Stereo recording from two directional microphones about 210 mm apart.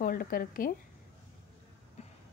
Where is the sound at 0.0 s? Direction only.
45° left (ahead or behind).